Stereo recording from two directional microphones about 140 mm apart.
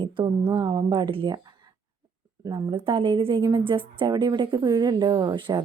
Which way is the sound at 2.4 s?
30° right (ahead or behind).